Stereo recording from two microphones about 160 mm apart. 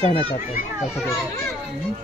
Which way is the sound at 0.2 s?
35° left (ahead or behind).